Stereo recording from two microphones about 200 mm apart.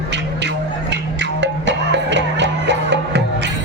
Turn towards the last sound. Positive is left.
turn(degrees=-60)  # may be behind; listen again after turning